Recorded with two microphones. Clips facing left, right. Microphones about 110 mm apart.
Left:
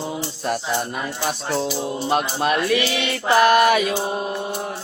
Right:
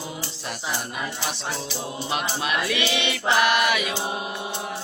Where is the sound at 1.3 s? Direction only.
50° left (ahead or behind).